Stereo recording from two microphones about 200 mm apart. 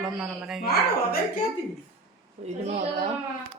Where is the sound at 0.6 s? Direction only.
50° left (ahead or behind).